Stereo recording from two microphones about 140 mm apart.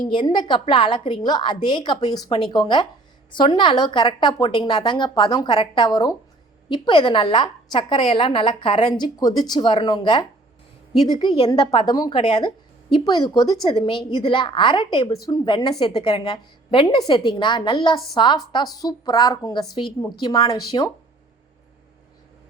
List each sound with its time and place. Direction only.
0.0 s a woman's voice: 30° left (ahead or behind)